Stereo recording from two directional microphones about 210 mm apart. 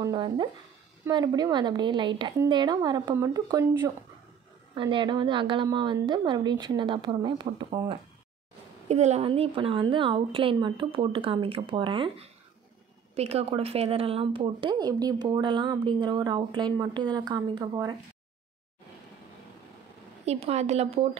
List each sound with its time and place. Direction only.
0.0 s speech: 20° right (ahead or behind)
8.8 s speech: 30° right (ahead or behind)
20.2 s speech: 30° right (ahead or behind)